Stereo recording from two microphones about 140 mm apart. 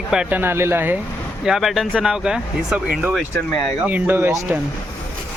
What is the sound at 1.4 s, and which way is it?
Speech, centre (ahead or behind).